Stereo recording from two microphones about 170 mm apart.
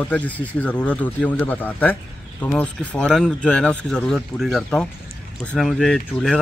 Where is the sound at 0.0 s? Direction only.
10° left (ahead or behind).